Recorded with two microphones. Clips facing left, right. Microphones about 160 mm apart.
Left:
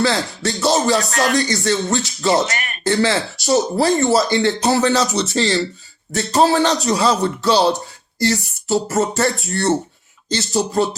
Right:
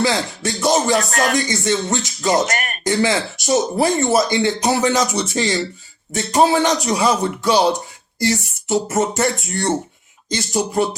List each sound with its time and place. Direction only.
0.0 s speech: 20° right (ahead or behind)
1.1 s speech: 45° right (ahead or behind)
1.4 s speech: 20° right (ahead or behind)
2.3 s speech: 45° right (ahead or behind)
2.8 s speech: 15° right (ahead or behind)